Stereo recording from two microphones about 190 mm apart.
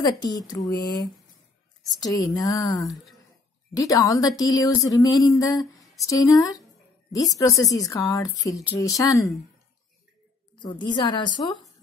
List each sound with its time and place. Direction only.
0.2 s speech: 20° left (ahead or behind)
10.6 s speech: 25° left (ahead or behind)